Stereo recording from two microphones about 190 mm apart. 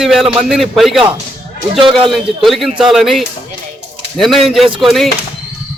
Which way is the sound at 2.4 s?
Centre (ahead or behind).